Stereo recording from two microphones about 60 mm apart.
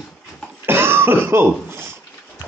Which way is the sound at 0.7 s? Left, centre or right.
Right.